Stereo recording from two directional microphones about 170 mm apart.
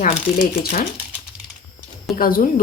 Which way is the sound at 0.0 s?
55° left (ahead or behind).